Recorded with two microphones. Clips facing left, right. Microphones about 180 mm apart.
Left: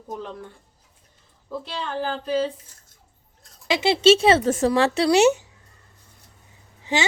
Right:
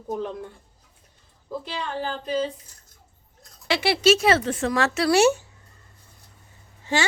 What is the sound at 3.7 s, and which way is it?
Speech, 20° left (ahead or behind).